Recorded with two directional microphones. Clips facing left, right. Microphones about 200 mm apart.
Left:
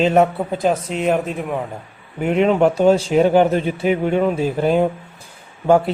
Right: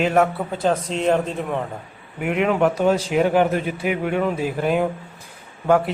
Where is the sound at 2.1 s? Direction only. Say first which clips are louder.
Left 4 dB; 30° left (ahead or behind).